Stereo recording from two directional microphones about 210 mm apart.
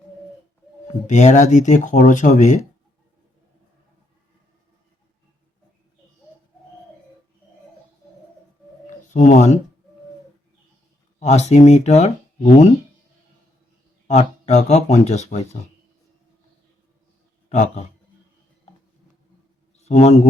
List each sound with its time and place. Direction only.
1.0 s speech: 35° left (ahead or behind)
9.1 s speech: 35° left (ahead or behind)
11.2 s speech: 30° left (ahead or behind)
14.1 s speech: 30° left (ahead or behind)
17.5 s speech: 30° left (ahead or behind)
19.9 s speech: 30° left (ahead or behind)